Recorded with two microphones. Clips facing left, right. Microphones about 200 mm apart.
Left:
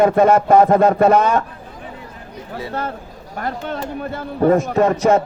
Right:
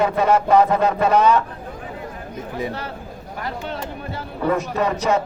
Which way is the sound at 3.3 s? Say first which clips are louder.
Left 4 dB; 50° left (ahead or behind).